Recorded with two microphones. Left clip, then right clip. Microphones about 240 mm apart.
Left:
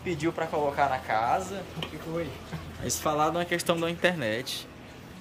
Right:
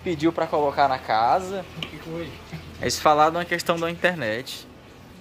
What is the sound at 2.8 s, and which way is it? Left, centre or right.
Speech, centre.